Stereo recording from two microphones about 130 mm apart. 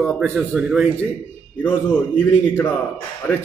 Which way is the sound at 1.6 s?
10° left (ahead or behind).